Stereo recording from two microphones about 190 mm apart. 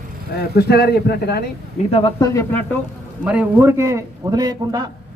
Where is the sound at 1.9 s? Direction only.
25° left (ahead or behind).